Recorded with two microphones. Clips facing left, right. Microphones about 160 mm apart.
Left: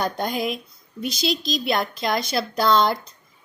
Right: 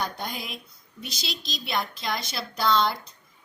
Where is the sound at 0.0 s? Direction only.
50° left (ahead or behind).